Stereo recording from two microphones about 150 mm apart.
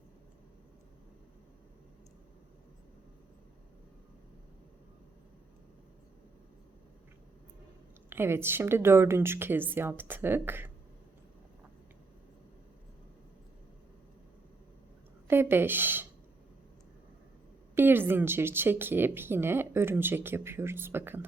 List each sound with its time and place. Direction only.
8.1 s a woman's voice: 15° right (ahead or behind)
15.3 s a woman's voice: 15° right (ahead or behind)
17.7 s a woman's voice: 15° right (ahead or behind)